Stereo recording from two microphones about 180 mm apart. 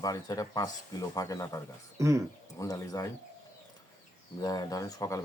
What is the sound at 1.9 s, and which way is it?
Speech, 15° right (ahead or behind).